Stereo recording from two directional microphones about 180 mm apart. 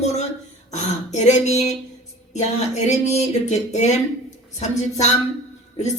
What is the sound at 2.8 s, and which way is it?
Speech, 40° left (ahead or behind).